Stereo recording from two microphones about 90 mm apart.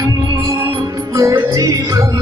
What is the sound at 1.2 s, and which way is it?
Music, 40° right (ahead or behind).